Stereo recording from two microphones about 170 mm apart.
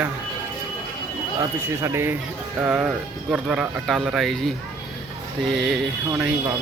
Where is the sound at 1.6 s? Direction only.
15° right (ahead or behind); by 4.5 s centre (ahead or behind).